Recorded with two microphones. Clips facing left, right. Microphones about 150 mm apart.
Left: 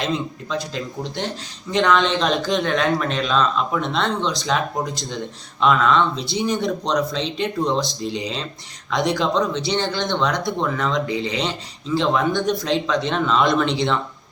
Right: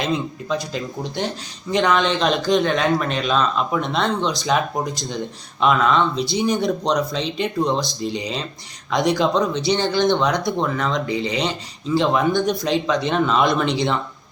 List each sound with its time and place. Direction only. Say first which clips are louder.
1.7 s a man's voice: even; 5° right (ahead or behind)